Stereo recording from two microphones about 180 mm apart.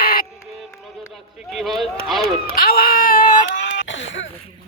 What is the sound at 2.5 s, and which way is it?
Baby cry, 55° left (ahead or behind).